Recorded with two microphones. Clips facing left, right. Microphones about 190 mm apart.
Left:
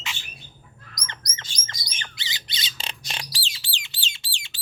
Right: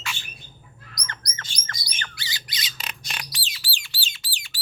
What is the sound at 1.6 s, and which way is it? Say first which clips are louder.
Bird: right 4 dB; 20° left (ahead or behind).